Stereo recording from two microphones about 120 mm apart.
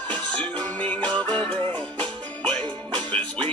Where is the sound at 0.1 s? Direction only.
10° left (ahead or behind).